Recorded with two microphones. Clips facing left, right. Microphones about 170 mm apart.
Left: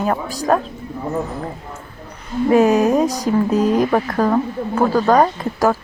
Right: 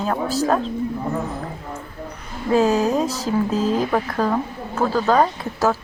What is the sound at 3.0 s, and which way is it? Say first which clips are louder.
Speech: left 4 dB; 15° left (ahead or behind).